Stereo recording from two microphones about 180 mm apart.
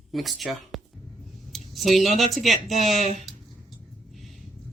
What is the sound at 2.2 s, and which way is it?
Speech, centre (ahead or behind).